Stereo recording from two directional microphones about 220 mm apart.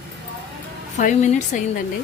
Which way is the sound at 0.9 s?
35° left (ahead or behind).